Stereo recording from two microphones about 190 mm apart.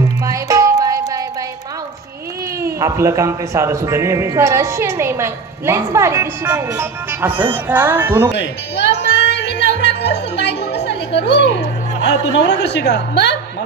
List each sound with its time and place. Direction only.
0.2 s music: 15° right (ahead or behind)
2.6 s speech: 15° right (ahead or behind)
8.3 s music: 65° left (ahead or behind)
11.2 s speech: 60° left (ahead or behind)